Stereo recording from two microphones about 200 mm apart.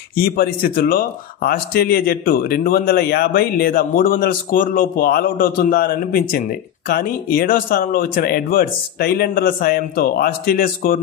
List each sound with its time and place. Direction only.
0.1 s speech: 50° left (ahead or behind)